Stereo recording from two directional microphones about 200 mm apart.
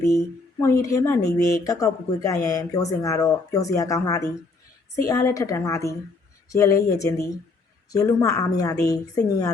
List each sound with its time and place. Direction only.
0.0 s speech: 15° left (ahead or behind)